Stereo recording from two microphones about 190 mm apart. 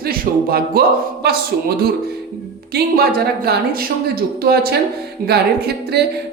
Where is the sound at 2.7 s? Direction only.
55° right (ahead or behind).